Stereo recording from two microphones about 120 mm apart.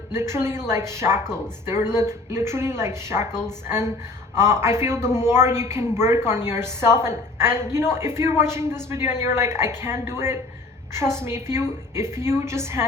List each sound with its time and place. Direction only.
0.1 s a woman's voice: 20° right (ahead or behind)